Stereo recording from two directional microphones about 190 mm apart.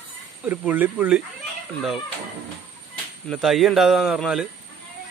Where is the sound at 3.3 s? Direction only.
Centre (ahead or behind).